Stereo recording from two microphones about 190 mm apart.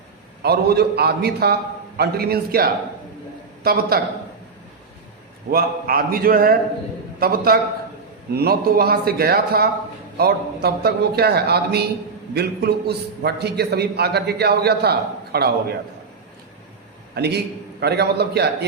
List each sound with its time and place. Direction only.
0.4 s a man's voice: 55° right (ahead or behind)
5.5 s a man's voice: 50° right (ahead or behind)
17.2 s a man's voice: 60° right (ahead or behind)